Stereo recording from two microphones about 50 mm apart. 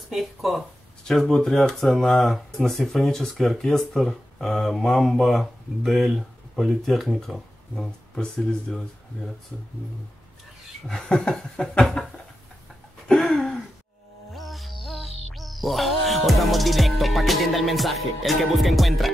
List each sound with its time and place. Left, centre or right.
0.1 s speech: centre
1.0 s speech: centre
7.7 s speech: centre
11.1 s speech: centre
13.1 s a sound: centre
14.3 s music: centre